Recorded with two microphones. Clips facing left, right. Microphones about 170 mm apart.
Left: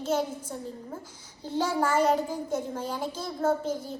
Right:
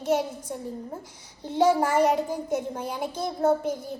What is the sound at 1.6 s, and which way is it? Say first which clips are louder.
A child's voice: right 3 dB; 10° right (ahead or behind).